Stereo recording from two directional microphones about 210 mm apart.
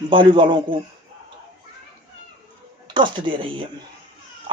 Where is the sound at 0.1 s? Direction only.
25° right (ahead or behind).